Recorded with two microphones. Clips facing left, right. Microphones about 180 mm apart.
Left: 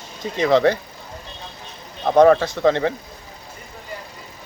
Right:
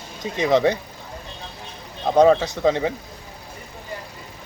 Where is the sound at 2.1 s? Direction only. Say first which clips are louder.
Left 2 dB; 15° right (ahead or behind).